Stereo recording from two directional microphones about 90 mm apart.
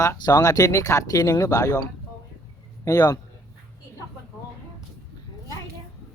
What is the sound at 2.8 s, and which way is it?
Speech, 45° left (ahead or behind).